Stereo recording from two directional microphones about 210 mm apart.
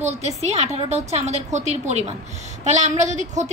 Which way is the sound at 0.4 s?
30° right (ahead or behind).